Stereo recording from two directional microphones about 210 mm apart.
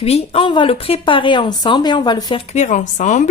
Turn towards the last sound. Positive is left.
turn(degrees=35)  # may be behind; listen again after turning